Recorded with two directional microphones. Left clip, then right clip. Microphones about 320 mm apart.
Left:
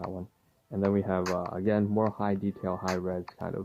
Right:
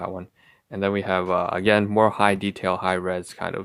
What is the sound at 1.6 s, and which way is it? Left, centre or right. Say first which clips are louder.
Speech: right 9 dB; centre.